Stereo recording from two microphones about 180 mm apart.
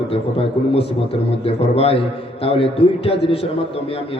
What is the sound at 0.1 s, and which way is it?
A man's voice, 30° left (ahead or behind).